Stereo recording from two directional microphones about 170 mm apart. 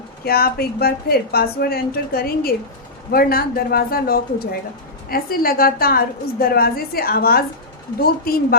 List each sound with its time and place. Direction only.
0.3 s a woman's voice: 65° left (ahead or behind)